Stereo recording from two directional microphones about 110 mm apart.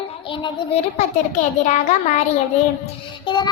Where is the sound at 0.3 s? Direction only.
50° left (ahead or behind).